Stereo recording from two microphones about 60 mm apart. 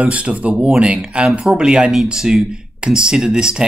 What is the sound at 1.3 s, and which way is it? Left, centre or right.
Speech, centre.